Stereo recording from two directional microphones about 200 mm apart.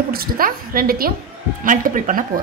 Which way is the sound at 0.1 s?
45° right (ahead or behind).